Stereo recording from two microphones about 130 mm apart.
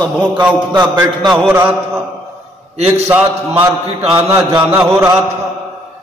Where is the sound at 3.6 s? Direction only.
40° right (ahead or behind).